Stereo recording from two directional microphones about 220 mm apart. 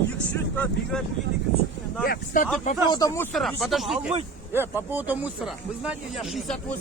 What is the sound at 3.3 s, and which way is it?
Speech, centre (ahead or behind).